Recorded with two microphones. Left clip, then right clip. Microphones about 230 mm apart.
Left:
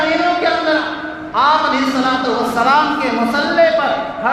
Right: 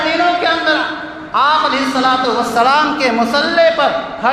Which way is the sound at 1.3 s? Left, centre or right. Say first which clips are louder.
Right 1 dB; right.